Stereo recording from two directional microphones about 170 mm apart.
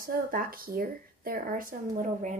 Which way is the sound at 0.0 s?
55° right (ahead or behind).